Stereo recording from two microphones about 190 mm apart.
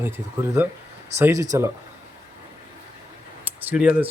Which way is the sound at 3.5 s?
5° right (ahead or behind).